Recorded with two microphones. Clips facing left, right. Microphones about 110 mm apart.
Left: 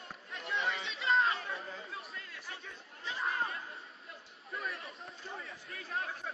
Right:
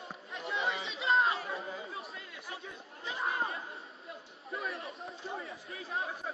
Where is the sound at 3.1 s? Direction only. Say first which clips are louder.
Right 1 dB; 20° right (ahead or behind).